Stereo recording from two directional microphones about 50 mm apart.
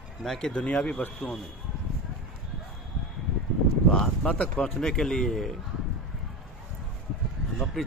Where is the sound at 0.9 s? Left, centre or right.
Left.